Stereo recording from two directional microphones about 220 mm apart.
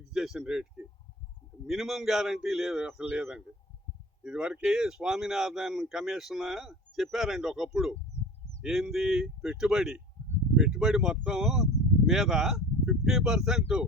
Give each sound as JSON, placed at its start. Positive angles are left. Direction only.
{"t": 0.1, "sound": "speech", "side_deg": 0}